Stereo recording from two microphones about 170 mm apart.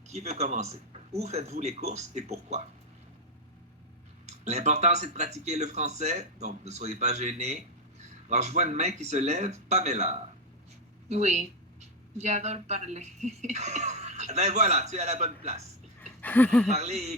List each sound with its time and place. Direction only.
0.1 s speech: 40° right (ahead or behind)
4.3 s speech: 40° right (ahead or behind)
16.2 s speech: 10° left (ahead or behind)
16.6 s speech: 40° right (ahead or behind)